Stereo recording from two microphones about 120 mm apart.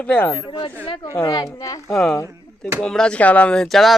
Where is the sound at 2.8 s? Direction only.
5° left (ahead or behind).